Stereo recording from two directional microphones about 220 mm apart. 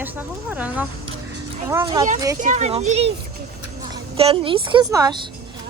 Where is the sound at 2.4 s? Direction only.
35° right (ahead or behind).